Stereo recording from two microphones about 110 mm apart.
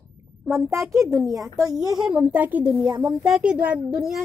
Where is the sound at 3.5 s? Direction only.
15° right (ahead or behind).